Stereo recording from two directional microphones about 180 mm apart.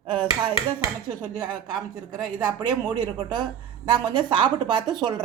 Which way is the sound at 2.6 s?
25° right (ahead or behind).